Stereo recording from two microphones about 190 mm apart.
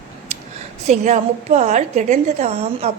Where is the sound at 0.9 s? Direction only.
40° right (ahead or behind).